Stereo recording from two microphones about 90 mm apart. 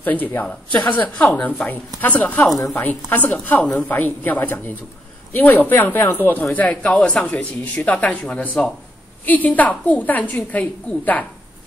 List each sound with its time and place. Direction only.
0.0 s speech: 20° left (ahead or behind)
3.7 s speech: 5° left (ahead or behind)
4.2 s speech: 20° left (ahead or behind)